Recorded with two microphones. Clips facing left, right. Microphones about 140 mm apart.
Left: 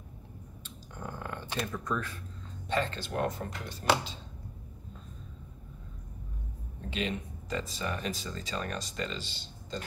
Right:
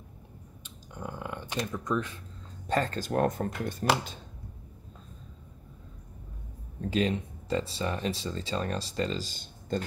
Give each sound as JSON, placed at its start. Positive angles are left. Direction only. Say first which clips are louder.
{"t": 0.7, "sound": "a sound", "louder": "right 2 dB", "side_deg": -15}
{"t": 2.7, "sound": "speech", "louder": "right 4 dB", "side_deg": -45}
{"t": 6.8, "sound": "speech", "louder": "right 6 dB", "side_deg": -40}